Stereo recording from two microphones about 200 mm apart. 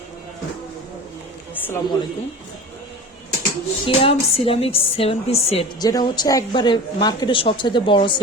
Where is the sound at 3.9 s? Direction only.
30° left (ahead or behind).